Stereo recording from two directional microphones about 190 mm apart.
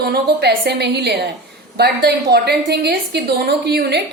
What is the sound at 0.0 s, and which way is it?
A woman's voice, 55° right (ahead or behind).